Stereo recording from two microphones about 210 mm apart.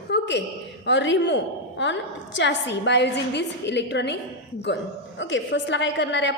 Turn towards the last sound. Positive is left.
turn(degrees=60)  # may be behind; listen again after turning